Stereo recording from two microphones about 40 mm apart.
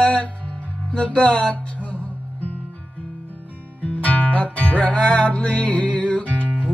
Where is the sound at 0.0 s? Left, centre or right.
Left.